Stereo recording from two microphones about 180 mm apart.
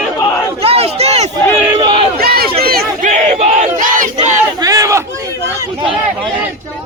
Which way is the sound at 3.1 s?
40° right (ahead or behind).